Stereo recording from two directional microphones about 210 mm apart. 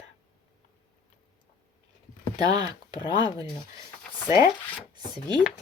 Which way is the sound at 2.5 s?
20° right (ahead or behind).